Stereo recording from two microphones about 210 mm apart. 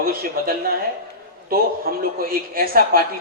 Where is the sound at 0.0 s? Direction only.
45° right (ahead or behind).